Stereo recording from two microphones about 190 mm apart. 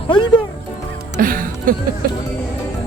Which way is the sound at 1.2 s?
45° right (ahead or behind).